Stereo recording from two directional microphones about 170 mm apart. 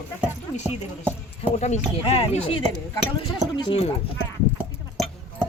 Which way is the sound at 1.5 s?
40° left (ahead or behind).